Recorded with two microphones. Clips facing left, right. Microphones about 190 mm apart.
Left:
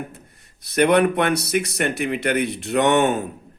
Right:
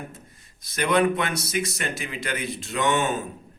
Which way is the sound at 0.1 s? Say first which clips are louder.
Left 1 dB; 65° left (ahead or behind).